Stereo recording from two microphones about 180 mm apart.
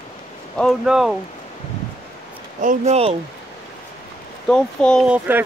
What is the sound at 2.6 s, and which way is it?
Speech, 40° right (ahead or behind).